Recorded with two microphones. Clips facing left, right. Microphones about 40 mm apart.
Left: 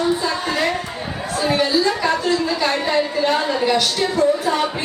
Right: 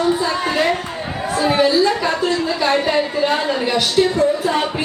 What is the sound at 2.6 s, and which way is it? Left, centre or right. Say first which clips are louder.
A woman's voice: right 2 dB; centre.